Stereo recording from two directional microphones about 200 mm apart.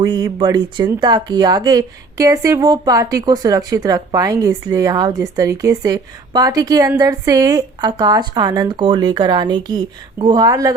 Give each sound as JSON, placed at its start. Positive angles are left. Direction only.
{"t": 0.0, "sound": "speech", "side_deg": -20}